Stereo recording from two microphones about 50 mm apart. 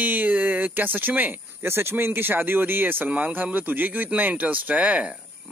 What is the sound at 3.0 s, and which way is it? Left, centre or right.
Speech, right.